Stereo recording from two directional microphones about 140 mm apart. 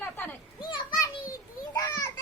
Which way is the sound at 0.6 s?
30° left (ahead or behind).